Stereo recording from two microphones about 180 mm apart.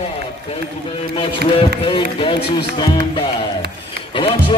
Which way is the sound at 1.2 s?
30° left (ahead or behind).